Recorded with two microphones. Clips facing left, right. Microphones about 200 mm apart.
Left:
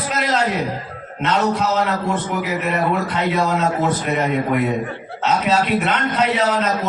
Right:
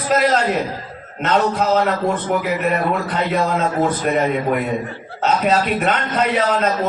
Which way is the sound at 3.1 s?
40° right (ahead or behind).